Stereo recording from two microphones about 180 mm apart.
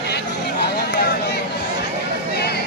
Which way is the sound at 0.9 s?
65° left (ahead or behind).